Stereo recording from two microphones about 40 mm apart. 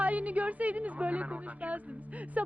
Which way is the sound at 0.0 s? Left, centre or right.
Right.